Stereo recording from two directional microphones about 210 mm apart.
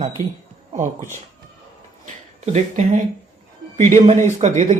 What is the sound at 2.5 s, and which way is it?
Speech, 35° right (ahead or behind).